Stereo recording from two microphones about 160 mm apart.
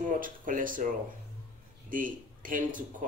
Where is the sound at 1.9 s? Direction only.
55° right (ahead or behind).